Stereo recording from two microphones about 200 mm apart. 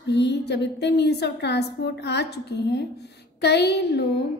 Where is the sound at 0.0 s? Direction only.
60° left (ahead or behind).